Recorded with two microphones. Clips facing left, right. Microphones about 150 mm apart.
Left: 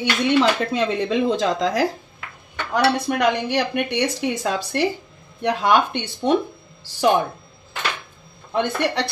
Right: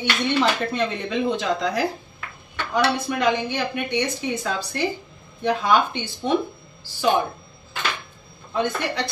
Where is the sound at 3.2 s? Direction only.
80° left.